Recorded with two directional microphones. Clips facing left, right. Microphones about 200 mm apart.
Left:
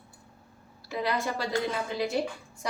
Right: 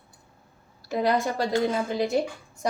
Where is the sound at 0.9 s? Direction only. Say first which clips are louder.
Right 6 dB; 45° right (ahead or behind).